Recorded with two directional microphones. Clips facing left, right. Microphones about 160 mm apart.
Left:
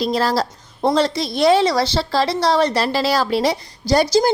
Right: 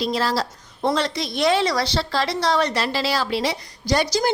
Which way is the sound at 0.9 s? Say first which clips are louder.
Left 5 dB; 30° left (ahead or behind).